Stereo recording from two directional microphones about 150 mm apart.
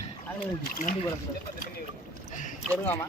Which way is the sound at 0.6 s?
60° left (ahead or behind).